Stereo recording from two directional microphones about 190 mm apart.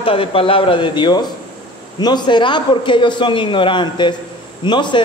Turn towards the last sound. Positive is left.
turn(degrees=25)  # may be behind; listen again after turning